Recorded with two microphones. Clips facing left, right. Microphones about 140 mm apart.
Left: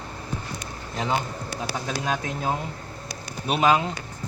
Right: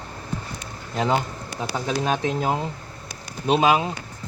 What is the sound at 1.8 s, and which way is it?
Speech, 25° right (ahead or behind).